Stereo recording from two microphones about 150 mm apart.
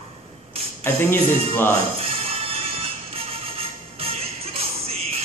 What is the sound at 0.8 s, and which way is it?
Speech, 15° left (ahead or behind).